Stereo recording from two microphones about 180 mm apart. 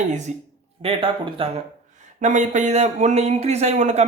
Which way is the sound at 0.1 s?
40° right (ahead or behind).